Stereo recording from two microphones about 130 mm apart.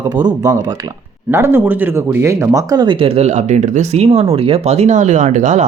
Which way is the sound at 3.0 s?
60° right (ahead or behind).